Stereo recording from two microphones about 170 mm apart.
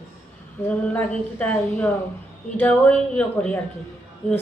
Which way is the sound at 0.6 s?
10° left (ahead or behind).